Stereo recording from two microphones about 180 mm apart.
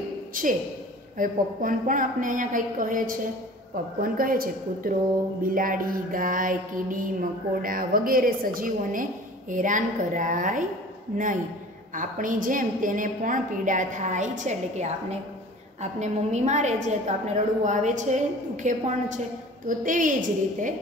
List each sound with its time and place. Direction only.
0.3 s speech: 50° right (ahead or behind)
1.1 s mantra: 50° right (ahead or behind)
15.8 s a woman's voice: 40° right (ahead or behind)
17.6 s mantra: 45° right (ahead or behind)